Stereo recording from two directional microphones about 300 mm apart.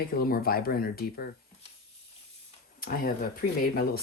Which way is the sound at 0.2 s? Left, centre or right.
Left.